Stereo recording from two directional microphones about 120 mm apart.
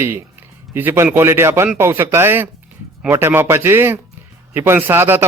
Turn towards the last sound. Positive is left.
turn(degrees=-15)  # may be behind; listen again after turning